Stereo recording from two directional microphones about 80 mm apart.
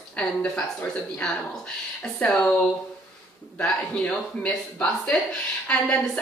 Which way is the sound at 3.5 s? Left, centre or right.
Centre.